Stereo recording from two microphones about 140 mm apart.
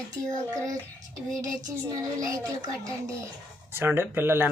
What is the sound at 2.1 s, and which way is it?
A child's voice, 25° right (ahead or behind).